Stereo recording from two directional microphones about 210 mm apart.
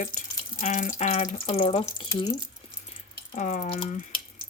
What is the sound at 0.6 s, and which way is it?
Speech, 35° left (ahead or behind).